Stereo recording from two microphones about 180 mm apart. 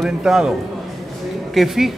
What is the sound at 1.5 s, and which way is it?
Speech, centre (ahead or behind).